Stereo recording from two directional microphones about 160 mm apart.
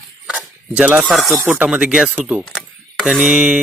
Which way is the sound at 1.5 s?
10° right (ahead or behind).